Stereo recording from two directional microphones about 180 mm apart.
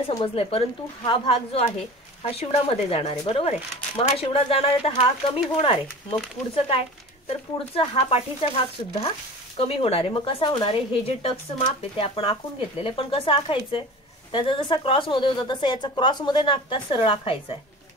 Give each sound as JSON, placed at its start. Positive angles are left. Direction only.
{"t": 0.0, "sound": "speech", "side_deg": 30}
{"t": 9.6, "sound": "a woman's voice", "side_deg": 35}